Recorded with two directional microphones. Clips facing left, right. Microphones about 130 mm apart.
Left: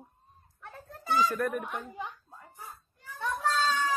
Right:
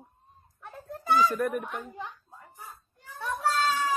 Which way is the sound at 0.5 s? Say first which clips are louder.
Right 5 dB; 15° right (ahead or behind).